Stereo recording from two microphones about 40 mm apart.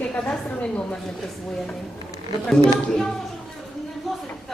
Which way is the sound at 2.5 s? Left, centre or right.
Centre.